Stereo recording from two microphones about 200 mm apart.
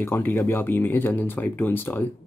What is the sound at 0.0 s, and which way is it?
Speech, 10° left (ahead or behind).